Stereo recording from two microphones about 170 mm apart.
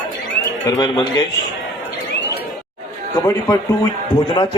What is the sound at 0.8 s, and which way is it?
Speech, 25° left (ahead or behind).